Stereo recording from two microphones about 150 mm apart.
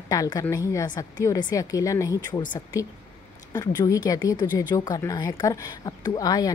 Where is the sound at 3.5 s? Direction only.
25° left (ahead or behind).